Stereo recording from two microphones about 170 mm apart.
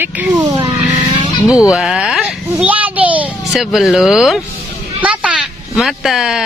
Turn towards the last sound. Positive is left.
turn(degrees=0)  # may be behind; listen again after turning